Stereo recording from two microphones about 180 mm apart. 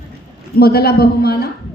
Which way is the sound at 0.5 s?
60° left (ahead or behind).